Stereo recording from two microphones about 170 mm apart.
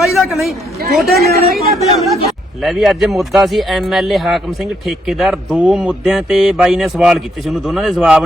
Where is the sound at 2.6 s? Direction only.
Centre (ahead or behind).